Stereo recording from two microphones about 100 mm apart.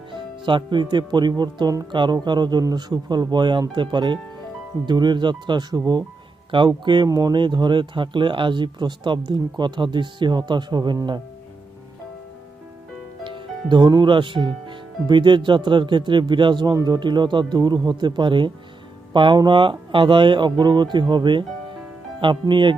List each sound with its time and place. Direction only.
0.1 s speech: 55° right (ahead or behind)
7.1 s speech: 35° right (ahead or behind)
7.3 s speech: 50° right (ahead or behind)
13.2 s speech: 55° right (ahead or behind)